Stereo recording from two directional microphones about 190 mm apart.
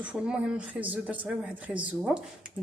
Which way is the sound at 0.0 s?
5° right (ahead or behind).